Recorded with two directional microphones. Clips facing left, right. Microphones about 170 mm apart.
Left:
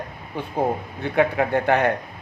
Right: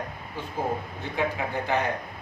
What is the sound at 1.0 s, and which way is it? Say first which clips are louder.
Speech: left 10 dB; 65° left (ahead or behind).